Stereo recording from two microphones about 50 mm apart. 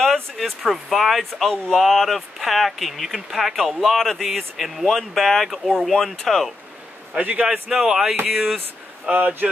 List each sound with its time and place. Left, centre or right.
0.4 s speech: centre
7.2 s a man's voice: right
7.6 s speech: centre
9.1 s speech: right